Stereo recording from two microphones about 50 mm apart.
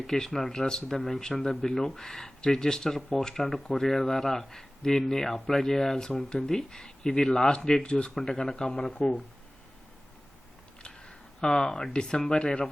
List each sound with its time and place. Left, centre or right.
0.1 s speech: centre
9.0 s speech: left
10.8 s speech: centre